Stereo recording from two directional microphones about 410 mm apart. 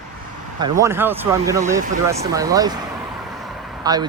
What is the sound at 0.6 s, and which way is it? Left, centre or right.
Speech, centre.